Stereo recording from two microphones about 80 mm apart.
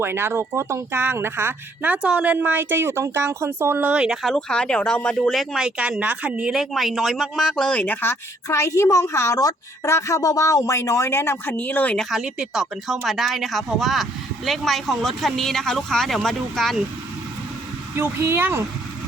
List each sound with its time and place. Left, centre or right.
0.0 s speech: right
3.8 s speech: centre
4.2 s speech: centre
5.3 s speech: centre
5.6 s speech: centre
7.5 s a woman's voice: centre; by 11.5 s left
11.5 s speech: left
12.1 s speech: centre
17.9 s speech: right